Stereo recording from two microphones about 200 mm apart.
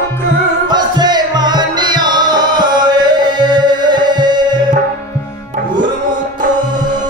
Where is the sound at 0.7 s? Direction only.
20° right (ahead or behind).